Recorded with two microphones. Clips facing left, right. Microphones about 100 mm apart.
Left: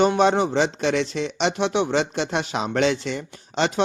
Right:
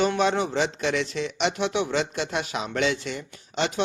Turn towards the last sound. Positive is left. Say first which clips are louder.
# left 4 dB
turn(degrees=35)  # may be behind; listen again after turning